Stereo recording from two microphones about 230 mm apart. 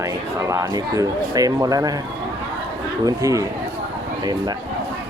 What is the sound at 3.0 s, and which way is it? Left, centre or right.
Speech, centre.